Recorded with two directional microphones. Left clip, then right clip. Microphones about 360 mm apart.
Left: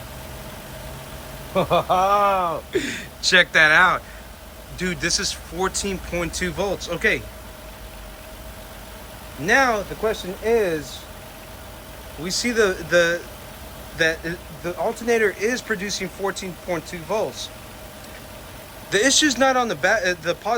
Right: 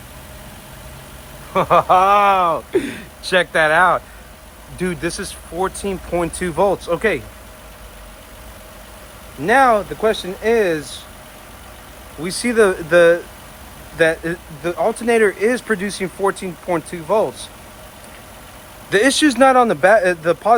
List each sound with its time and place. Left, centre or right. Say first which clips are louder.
1.5 s speech: right 6 dB; right
9.5 s speech: right 5 dB; centre
12.2 s speech: right 5 dB; centre
18.9 s speech: right 3 dB; centre